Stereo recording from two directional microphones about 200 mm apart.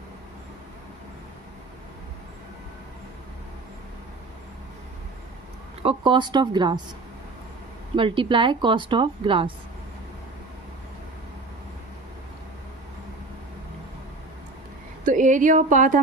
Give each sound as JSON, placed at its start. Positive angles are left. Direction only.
{"t": 5.8, "sound": "a woman's voice", "side_deg": -25}
{"t": 7.9, "sound": "a woman's voice", "side_deg": -25}
{"t": 15.0, "sound": "speech", "side_deg": -40}